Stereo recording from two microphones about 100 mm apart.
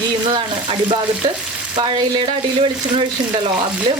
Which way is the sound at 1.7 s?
50° right (ahead or behind).